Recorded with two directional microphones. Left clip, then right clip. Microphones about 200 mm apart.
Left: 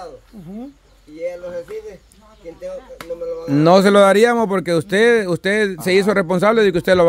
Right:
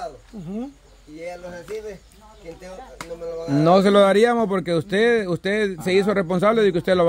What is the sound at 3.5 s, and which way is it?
Speech, 35° left (ahead or behind).